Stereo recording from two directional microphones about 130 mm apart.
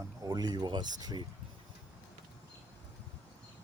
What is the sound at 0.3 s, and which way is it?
Speech, 30° right (ahead or behind).